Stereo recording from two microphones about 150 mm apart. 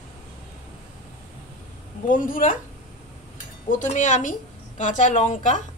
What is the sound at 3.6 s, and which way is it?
A woman's voice, 55° left (ahead or behind).